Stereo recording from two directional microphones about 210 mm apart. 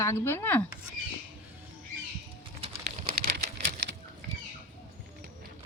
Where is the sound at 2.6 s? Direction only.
30° right (ahead or behind).